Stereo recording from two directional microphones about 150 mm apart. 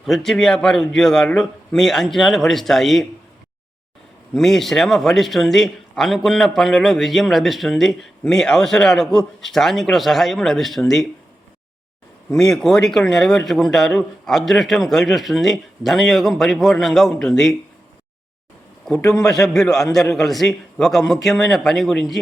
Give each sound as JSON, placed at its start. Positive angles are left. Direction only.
{"t": 0.0, "sound": "speech", "side_deg": 0}
{"t": 4.4, "sound": "speech", "side_deg": 0}
{"t": 12.4, "sound": "speech", "side_deg": 5}
{"t": 19.0, "sound": "a man's voice", "side_deg": 25}
{"t": 19.3, "sound": "speech", "side_deg": 0}